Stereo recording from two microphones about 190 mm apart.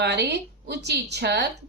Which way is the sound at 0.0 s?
60° right (ahead or behind).